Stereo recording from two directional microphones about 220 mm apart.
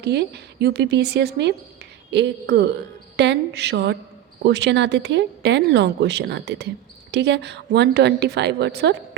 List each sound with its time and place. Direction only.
0.0 s speech: 50° right (ahead or behind)